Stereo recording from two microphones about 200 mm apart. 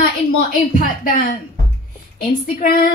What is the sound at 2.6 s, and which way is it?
Speech, 45° left (ahead or behind).